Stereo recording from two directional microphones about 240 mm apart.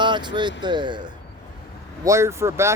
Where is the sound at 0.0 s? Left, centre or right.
Centre.